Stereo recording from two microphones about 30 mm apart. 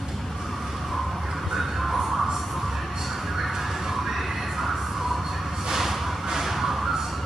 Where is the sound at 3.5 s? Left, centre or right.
Centre.